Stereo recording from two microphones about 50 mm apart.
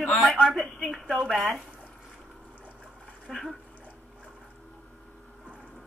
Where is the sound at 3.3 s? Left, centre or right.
Centre.